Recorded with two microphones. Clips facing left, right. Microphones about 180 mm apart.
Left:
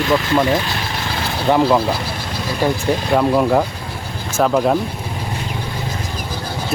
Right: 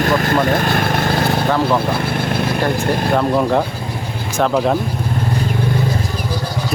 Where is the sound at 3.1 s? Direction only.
5° left (ahead or behind).